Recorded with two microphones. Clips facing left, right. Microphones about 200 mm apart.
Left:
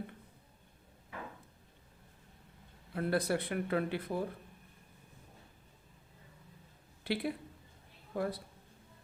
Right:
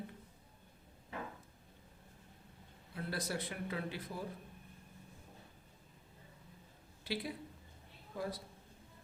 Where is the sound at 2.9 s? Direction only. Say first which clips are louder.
Left 8 dB; 60° left (ahead or behind).